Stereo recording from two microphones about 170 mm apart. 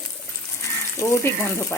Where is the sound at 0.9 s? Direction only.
15° left (ahead or behind).